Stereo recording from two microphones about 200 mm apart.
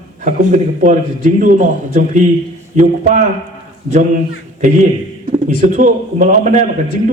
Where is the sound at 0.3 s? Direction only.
40° right (ahead or behind).